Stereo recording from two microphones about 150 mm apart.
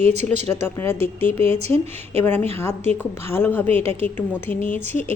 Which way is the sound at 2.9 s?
15° left (ahead or behind).